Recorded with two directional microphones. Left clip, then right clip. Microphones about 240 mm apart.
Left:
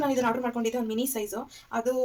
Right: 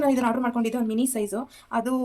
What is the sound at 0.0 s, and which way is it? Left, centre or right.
A woman's voice, right.